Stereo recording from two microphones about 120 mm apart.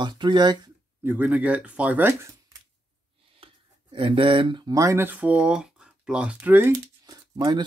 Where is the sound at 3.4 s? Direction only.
45° right (ahead or behind).